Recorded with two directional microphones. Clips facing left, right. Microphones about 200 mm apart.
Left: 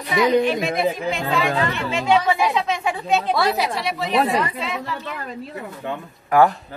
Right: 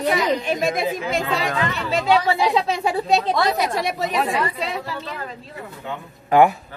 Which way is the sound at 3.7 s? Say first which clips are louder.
Right 2 dB; 45° right (ahead or behind).